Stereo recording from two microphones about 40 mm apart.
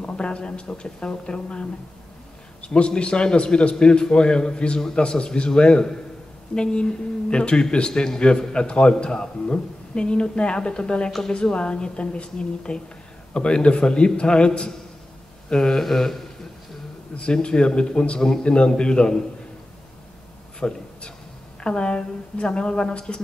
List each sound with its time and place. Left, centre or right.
0.0 s a woman's voice: left
15.5 s speech: centre
17.2 s a woman's voice: left
20.6 s a woman's voice: centre